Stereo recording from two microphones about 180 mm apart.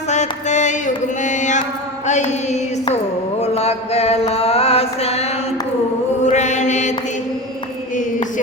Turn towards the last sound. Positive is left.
turn(degrees=40)  # may be behind; listen again after turning